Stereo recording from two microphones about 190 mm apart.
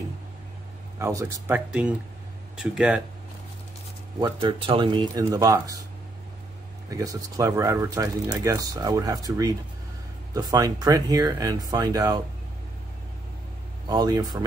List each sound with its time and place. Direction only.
0.9 s speech: 15° right (ahead or behind)
4.2 s speech: 25° right (ahead or behind)
6.9 s speech: 15° right (ahead or behind)
13.8 s speech: 20° right (ahead or behind)